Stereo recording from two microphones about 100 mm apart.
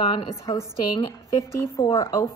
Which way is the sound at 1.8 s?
40° left (ahead or behind).